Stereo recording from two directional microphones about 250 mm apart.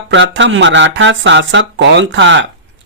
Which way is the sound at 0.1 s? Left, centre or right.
Right.